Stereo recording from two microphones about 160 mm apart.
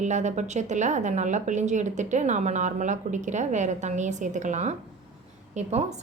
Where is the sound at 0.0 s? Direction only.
50° right (ahead or behind).